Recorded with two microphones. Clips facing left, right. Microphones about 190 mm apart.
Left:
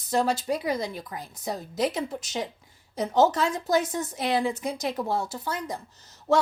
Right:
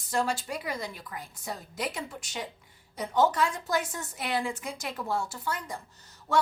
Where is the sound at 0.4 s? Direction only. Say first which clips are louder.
Left 7 dB; 40° left (ahead or behind).